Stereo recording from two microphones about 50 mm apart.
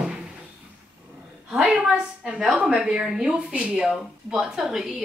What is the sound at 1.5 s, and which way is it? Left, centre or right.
A woman's voice, centre.